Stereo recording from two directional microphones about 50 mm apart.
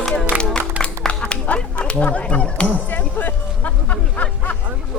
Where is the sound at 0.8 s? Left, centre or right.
Left.